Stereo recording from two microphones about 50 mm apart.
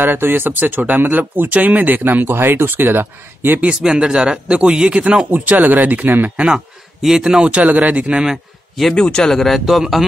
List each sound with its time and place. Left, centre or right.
0.0 s speech: right
3.8 s speech: centre
5.3 s speech: right
7.0 s speech: centre
7.5 s speech: right
8.9 s speech: centre